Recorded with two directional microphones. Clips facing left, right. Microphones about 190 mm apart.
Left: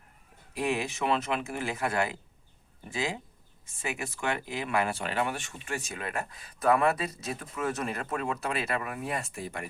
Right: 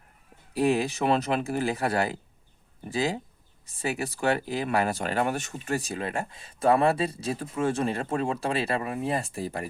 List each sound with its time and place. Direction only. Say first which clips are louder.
0.5 s speech: right 6 dB; 35° right (ahead or behind)